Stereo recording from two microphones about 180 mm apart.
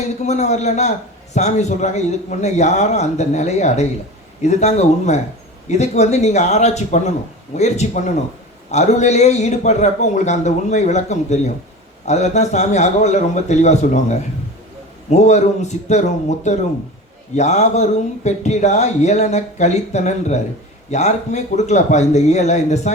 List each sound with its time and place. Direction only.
0.2 s a man's voice: 40° left (ahead or behind)